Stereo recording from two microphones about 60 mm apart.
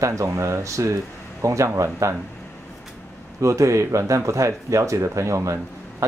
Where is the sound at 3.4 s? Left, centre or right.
Right.